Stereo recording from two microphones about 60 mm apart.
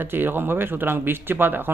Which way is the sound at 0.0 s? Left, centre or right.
Right.